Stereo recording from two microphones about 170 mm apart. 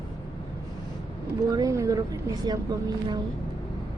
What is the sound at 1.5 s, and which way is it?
Vehicle, 20° right (ahead or behind).